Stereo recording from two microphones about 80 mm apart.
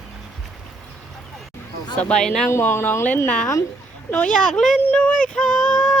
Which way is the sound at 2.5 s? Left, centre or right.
Left.